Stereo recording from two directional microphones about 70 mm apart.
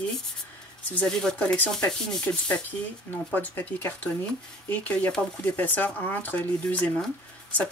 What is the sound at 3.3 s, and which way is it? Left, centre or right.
A woman's voice, left.